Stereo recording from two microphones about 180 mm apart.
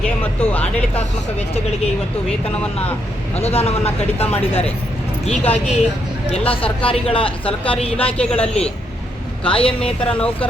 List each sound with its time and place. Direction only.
0.0 s speech: 10° left (ahead or behind)
1.4 s speech: 35° left (ahead or behind)
3.3 s speech: 35° left (ahead or behind)
4.3 s speech: 10° left (ahead or behind)
5.2 s speech: 35° left (ahead or behind)
7.9 s speech: 5° left (ahead or behind)
9.4 s speech: 30° left (ahead or behind)
9.8 s speech: 5° left (ahead or behind)